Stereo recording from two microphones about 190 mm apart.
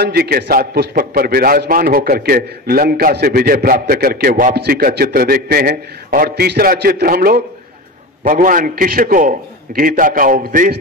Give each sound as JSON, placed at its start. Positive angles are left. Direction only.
{"t": 0.0, "sound": "a man's voice", "side_deg": -55}